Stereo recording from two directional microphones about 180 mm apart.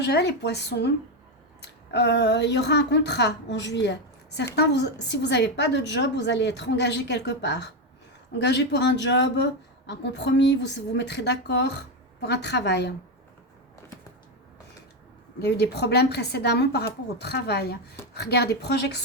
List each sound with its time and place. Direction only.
0.0 s speech: 65° left (ahead or behind)
15.4 s a woman's voice: 65° left (ahead or behind)